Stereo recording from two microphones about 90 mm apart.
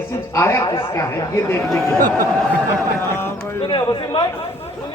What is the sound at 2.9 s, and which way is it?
Speech, 25° left (ahead or behind).